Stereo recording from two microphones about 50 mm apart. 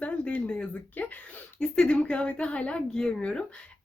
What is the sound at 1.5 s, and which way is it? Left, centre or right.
A woman's voice, centre.